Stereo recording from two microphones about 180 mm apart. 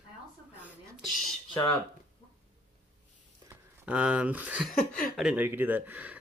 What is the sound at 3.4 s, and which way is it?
Speech, 5° right (ahead or behind).